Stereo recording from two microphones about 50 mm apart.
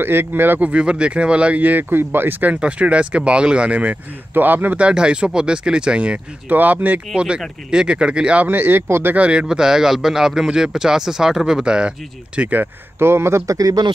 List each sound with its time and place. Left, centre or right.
0.0 s a man's voice: right
0.6 s speech: right
2.6 s speech: right
4.7 s speech: right
6.5 s speech: right
7.2 s speech: centre
8.5 s speech: right
8.8 s a man's voice: right
9.1 s speech: right
9.5 s speech: centre
12.4 s speech: right
13.0 s speech: right